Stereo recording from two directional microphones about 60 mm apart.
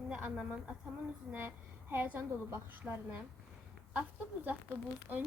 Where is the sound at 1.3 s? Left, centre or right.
Right.